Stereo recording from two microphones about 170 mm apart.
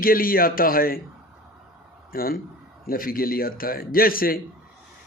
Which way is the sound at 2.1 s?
60° left (ahead or behind).